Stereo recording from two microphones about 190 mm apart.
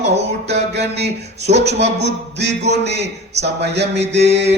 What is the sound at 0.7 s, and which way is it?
Speech, 60° right (ahead or behind).